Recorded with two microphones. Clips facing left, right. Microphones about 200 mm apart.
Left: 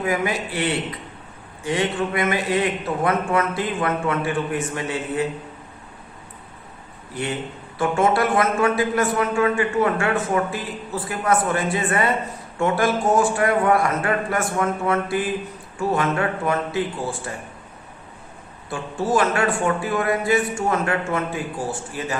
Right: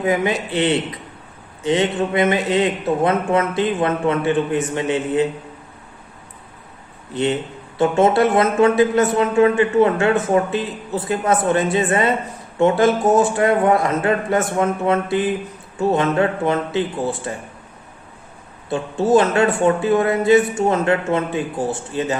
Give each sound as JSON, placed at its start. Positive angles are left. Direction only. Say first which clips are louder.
{"t": 0.0, "sound": "a man's voice", "louder": "right 4 dB", "side_deg": -20}
{"t": 7.1, "sound": "a man's voice", "louder": "right 7 dB", "side_deg": -25}
{"t": 18.7, "sound": "a man's voice", "louder": "right 6 dB", "side_deg": -25}